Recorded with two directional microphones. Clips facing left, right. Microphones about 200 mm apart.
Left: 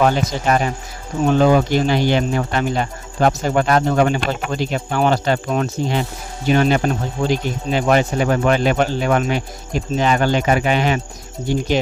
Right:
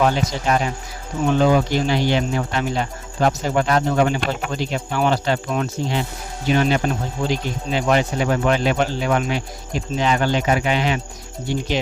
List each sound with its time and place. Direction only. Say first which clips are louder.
0.0 s speech: left 2 dB; 55° left (ahead or behind)